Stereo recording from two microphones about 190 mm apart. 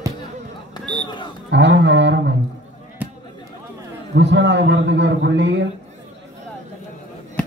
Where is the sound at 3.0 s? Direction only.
10° right (ahead or behind).